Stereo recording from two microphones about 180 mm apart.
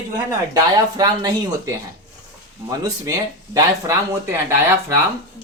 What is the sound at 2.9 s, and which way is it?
Speech, 20° right (ahead or behind).